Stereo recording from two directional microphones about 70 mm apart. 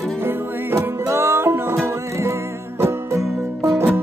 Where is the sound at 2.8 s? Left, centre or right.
Right.